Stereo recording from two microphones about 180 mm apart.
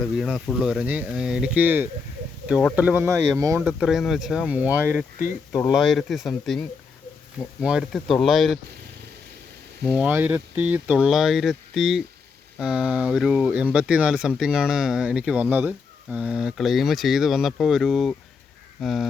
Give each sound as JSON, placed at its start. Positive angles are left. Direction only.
{"t": 0.0, "sound": "speech", "side_deg": 5}
{"t": 3.6, "sound": "speech", "side_deg": -5}
{"t": 9.8, "sound": "speech", "side_deg": -5}